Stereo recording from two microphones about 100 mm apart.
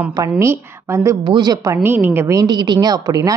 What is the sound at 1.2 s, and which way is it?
Speech, 45° right (ahead or behind).